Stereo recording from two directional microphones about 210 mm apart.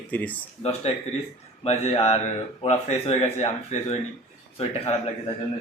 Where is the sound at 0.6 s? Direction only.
30° left (ahead or behind).